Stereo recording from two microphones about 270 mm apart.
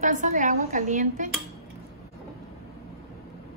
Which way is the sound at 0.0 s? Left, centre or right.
Right.